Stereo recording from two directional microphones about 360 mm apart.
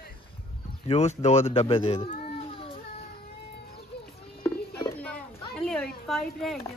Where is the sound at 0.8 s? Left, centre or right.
Centre.